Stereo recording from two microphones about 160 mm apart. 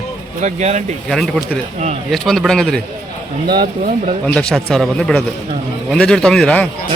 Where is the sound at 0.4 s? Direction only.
45° right (ahead or behind).